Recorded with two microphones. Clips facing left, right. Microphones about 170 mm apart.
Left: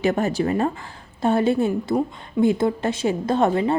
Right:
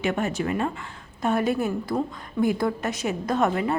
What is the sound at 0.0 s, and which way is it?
A woman's voice, 35° left (ahead or behind).